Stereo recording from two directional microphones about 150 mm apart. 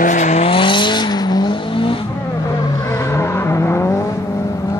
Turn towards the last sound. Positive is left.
turn(degrees=15)  # may be behind; listen again after turning